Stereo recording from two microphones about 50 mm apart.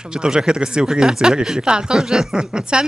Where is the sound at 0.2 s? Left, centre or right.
Centre.